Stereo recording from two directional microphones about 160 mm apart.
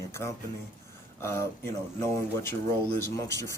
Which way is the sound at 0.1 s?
15° left (ahead or behind).